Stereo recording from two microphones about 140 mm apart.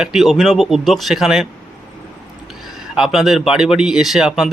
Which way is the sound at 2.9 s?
5° right (ahead or behind).